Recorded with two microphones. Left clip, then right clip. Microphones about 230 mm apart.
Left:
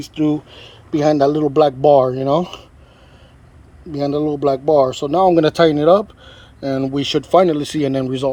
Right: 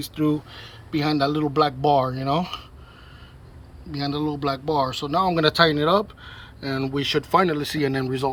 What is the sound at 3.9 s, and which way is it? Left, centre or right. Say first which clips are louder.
Speech: left 8 dB; left.